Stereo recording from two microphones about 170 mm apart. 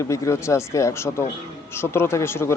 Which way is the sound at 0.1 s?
15° left (ahead or behind).